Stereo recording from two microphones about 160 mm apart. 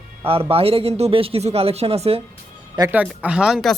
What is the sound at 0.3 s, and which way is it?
Speech, 35° right (ahead or behind).